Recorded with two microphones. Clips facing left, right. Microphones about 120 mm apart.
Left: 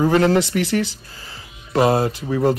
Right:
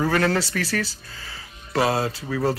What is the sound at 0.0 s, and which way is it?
Speech, 20° left (ahead or behind).